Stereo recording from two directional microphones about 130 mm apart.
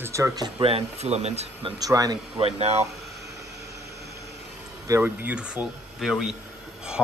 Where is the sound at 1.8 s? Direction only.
30° right (ahead or behind).